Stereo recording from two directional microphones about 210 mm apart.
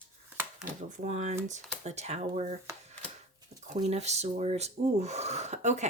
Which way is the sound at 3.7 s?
30° right (ahead or behind).